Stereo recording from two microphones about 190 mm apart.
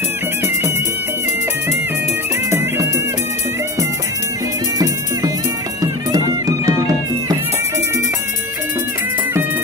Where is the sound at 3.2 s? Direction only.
35° left (ahead or behind).